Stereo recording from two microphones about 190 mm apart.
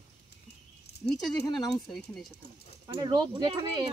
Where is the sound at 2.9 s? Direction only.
20° right (ahead or behind).